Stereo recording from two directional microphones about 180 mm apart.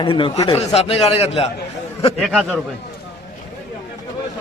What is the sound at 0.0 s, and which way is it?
A man's voice, 30° left (ahead or behind).